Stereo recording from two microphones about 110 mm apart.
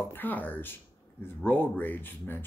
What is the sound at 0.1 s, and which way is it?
Speech, 15° left (ahead or behind).